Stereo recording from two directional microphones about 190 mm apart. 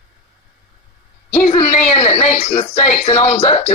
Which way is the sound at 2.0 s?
30° left (ahead or behind).